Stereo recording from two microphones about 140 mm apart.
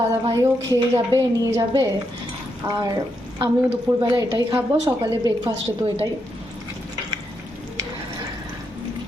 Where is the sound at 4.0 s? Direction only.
35° right (ahead or behind).